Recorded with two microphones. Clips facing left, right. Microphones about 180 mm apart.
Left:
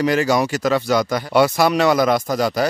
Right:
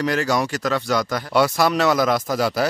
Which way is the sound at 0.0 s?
5° left (ahead or behind).